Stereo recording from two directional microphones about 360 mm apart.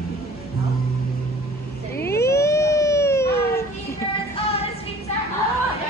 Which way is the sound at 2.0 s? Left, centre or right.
Centre.